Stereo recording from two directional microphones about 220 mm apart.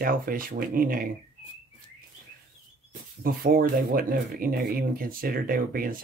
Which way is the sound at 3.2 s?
40° right (ahead or behind).